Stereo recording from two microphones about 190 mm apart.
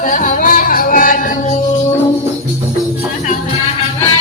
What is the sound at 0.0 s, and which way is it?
Music, 40° left (ahead or behind).